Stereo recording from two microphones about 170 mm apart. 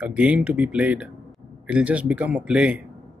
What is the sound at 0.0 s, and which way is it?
Speech, 5° right (ahead or behind).